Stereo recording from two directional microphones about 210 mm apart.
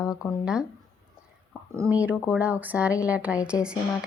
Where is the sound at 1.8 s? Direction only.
10° right (ahead or behind).